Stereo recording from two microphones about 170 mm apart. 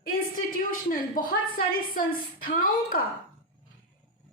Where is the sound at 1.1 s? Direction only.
55° left (ahead or behind).